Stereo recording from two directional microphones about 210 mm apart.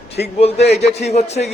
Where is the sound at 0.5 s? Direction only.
30° left (ahead or behind).